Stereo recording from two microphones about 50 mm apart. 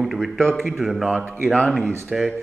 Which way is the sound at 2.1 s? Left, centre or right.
Centre.